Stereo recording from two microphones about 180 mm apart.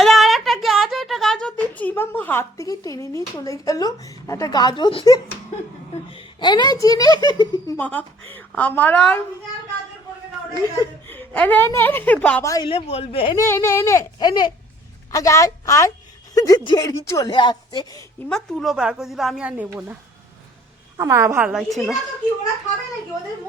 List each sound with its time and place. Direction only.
0.0 s a sound: centre (ahead or behind); by 5.2 s 25° left (ahead or behind)
6.1 s a woman's voice: 25° left (ahead or behind)
7.8 s a woman's voice: 10° left (ahead or behind)
11.1 s a woman's voice: 10° left (ahead or behind)
12.6 s a woman's voice: 30° left (ahead or behind)
13.3 s a woman's voice: 15° left (ahead or behind)
18.3 s a woman's voice: 5° left (ahead or behind)